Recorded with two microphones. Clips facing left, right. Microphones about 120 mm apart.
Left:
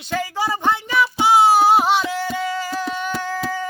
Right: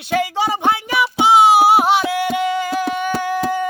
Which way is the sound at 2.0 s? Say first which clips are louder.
Right 4 dB; 65° right (ahead or behind).